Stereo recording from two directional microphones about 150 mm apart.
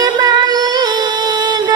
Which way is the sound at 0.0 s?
30° right (ahead or behind).